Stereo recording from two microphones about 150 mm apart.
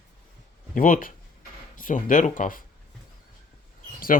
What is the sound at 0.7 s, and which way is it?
Speech, 65° left (ahead or behind).